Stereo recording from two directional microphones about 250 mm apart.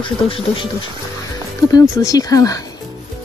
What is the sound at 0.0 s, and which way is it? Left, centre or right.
Speech, centre.